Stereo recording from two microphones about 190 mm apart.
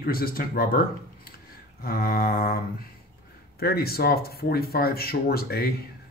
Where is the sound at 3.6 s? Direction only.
55° left (ahead or behind).